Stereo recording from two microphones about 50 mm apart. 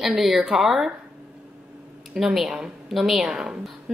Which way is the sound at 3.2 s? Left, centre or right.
Centre.